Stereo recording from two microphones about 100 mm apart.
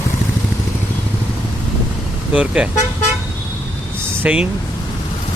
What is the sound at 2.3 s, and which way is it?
Speech, 10° right (ahead or behind).